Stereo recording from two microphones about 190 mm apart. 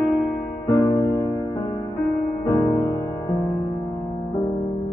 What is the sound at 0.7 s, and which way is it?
Music, 25° left (ahead or behind).